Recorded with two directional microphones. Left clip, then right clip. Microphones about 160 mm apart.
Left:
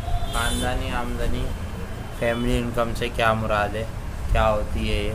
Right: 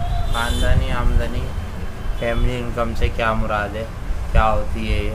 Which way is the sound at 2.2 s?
20° left (ahead or behind).